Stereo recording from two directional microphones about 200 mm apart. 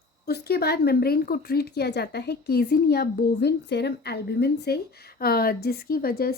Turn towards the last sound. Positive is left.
turn(degrees=50)  # may be behind; listen again after turning